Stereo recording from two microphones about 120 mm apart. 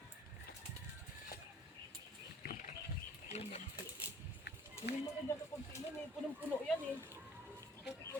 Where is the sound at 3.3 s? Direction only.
65° left (ahead or behind).